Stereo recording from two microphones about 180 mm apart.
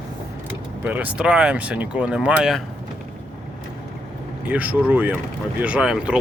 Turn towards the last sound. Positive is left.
turn(degrees=-5)  # may be behind; listen again after turning